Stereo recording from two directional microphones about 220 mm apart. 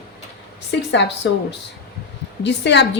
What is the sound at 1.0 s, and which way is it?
Speech, 55° left (ahead or behind).